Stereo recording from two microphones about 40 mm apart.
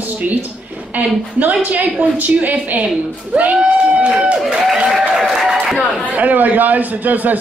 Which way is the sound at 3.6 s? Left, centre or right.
Right.